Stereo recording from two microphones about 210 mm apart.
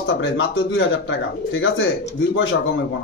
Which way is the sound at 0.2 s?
65° left (ahead or behind).